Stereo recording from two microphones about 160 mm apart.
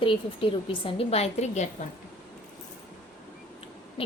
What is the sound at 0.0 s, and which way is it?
A woman's voice, 35° left (ahead or behind).